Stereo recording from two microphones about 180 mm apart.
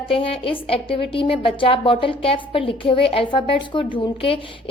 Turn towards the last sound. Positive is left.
turn(degrees=30)  # may be behind; listen again after turning